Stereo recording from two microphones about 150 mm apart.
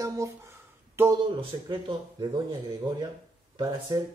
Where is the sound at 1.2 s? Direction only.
35° right (ahead or behind).